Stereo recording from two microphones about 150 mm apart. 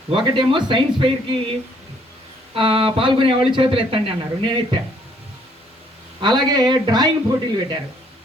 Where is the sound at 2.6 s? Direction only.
35° right (ahead or behind).